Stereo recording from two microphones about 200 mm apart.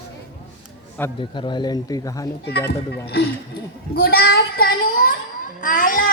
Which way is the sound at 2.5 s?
55° left (ahead or behind).